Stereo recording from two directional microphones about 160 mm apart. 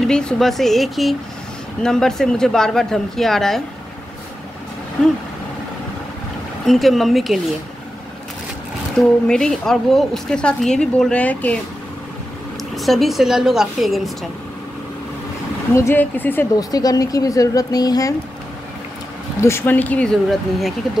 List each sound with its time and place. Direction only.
0.0 s speech: 5° left (ahead or behind)
6.6 s speech: centre (ahead or behind)
8.9 s speech: 5° left (ahead or behind)
12.7 s speech: centre (ahead or behind)
15.7 s speech: 15° left (ahead or behind)
16.5 s speech: 25° left (ahead or behind)
19.4 s speech: 15° left (ahead or behind)